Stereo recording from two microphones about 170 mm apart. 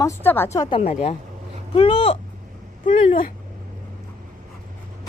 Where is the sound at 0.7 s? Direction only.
40° left (ahead or behind).